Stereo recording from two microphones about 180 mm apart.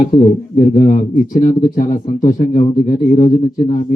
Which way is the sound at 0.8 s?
50° left (ahead or behind).